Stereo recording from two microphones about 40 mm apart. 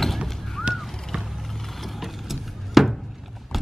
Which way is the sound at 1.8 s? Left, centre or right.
Centre.